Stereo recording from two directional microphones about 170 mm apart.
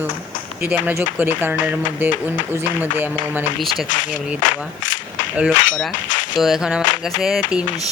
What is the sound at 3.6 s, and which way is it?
Speech, centre (ahead or behind).